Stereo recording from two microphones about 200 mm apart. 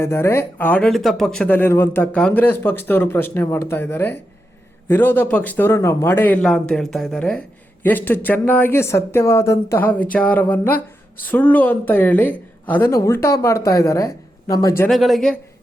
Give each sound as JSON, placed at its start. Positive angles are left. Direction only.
{"t": 0.0, "sound": "a man's voice", "side_deg": 15}
{"t": 14.8, "sound": "speech", "side_deg": 0}